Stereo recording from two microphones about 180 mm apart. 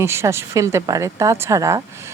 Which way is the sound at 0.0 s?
15° right (ahead or behind).